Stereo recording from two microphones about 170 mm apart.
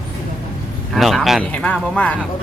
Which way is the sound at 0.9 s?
Centre (ahead or behind).